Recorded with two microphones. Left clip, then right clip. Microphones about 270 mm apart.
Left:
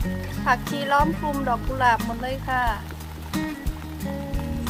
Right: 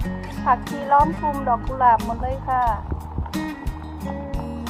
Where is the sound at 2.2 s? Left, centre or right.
Left.